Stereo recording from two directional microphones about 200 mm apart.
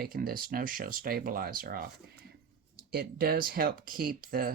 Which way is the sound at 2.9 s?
50° right (ahead or behind).